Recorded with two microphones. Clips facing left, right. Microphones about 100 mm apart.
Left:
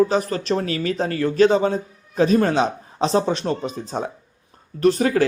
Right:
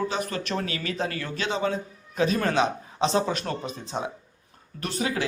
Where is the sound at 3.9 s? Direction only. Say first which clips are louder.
Left 4 dB; 40° left (ahead or behind).